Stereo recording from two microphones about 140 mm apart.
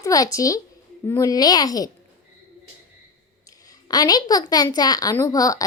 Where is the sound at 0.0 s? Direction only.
25° left (ahead or behind).